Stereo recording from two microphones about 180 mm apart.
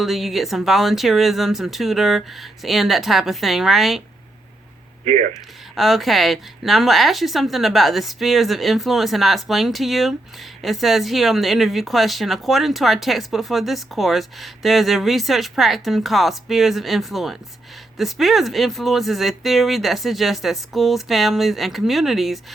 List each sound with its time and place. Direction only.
0.0 s speech: centre (ahead or behind)
5.0 s speech: 40° right (ahead or behind)
5.7 s speech: centre (ahead or behind)